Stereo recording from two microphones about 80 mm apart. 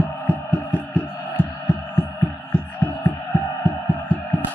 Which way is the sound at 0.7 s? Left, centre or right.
Centre.